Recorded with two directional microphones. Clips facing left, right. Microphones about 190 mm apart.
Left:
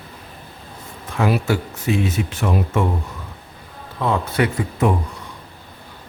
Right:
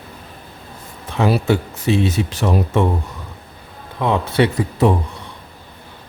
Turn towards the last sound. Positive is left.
turn(degrees=-30)  # may be behind; listen again after turning